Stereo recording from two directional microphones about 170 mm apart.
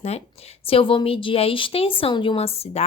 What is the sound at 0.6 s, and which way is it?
A woman's voice, 35° left (ahead or behind).